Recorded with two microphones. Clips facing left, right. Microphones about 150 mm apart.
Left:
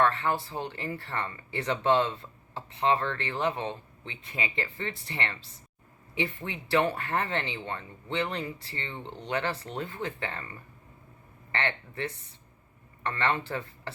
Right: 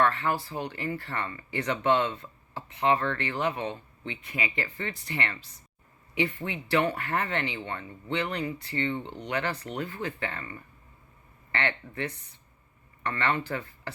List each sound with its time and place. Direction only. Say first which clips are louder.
0.0 s speech: even; 25° left (ahead or behind)
11.5 s speech: right 1 dB; 25° left (ahead or behind)